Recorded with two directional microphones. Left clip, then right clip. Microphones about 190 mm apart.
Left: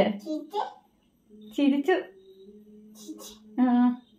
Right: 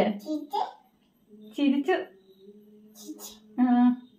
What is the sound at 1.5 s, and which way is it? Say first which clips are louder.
Speech: left 1 dB; 45° left (ahead or behind).